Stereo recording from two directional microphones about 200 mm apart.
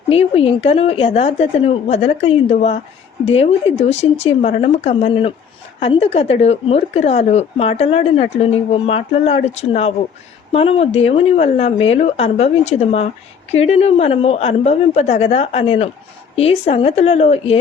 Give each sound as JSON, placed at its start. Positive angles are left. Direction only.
{"t": 0.1, "sound": "a woman's voice", "side_deg": 30}